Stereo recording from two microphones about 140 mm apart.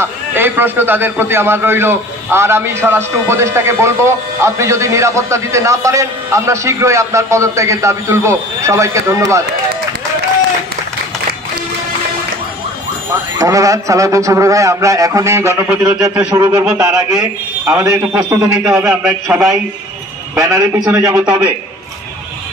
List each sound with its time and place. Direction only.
0.0 s a man's voice: 15° right (ahead or behind)
13.4 s a man's voice: 25° right (ahead or behind)
16.6 s a man's voice: 10° right (ahead or behind)
20.3 s a man's voice: 20° right (ahead or behind)